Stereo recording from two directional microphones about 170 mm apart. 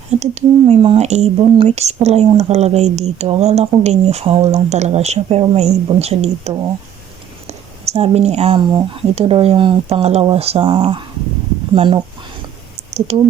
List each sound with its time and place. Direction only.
0.2 s speech: 40° right (ahead or behind)